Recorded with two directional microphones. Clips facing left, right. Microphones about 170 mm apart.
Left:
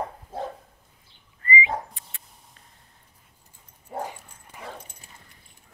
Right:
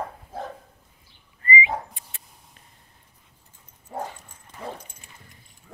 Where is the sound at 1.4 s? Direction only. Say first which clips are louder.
Right 1 dB; 20° right (ahead or behind).